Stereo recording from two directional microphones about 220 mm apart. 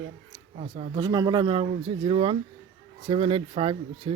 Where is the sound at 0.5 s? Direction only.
30° right (ahead or behind).